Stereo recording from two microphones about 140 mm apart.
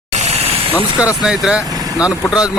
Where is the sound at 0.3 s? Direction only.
50° right (ahead or behind).